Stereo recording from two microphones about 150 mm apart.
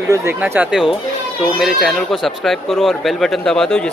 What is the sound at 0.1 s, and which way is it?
A man's voice, 15° right (ahead or behind).